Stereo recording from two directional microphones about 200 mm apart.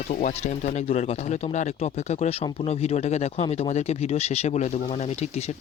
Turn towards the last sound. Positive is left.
turn(degrees=30)  # may be behind; listen again after turning